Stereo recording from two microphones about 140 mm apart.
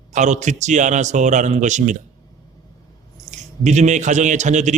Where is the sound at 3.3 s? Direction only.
55° right (ahead or behind).